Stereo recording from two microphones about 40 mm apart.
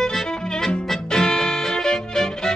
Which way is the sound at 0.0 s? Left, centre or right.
Centre.